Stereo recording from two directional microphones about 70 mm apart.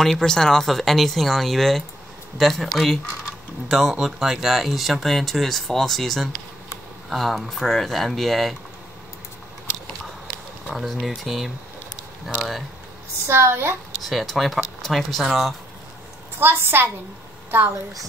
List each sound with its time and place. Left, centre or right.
0.0 s speech: centre
10.2 s speech: centre
13.3 s a woman's voice: right
14.0 s speech: centre
16.3 s a woman's voice: right